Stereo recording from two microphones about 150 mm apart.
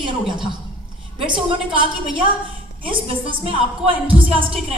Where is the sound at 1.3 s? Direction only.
35° right (ahead or behind).